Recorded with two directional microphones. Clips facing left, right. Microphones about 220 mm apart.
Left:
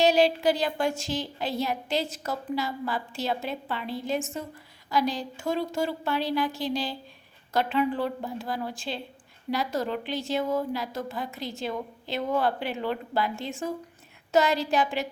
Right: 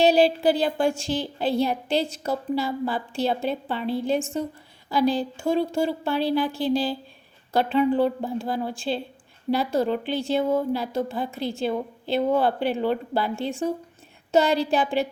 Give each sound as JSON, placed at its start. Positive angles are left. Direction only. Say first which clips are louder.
{"t": 0.0, "sound": "a woman's voice", "louder": "right 3 dB", "side_deg": -30}
{"t": 6.7, "sound": "a woman's voice", "louder": "right 7 dB", "side_deg": -5}
{"t": 7.5, "sound": "a woman's voice", "louder": "right 5 dB", "side_deg": -30}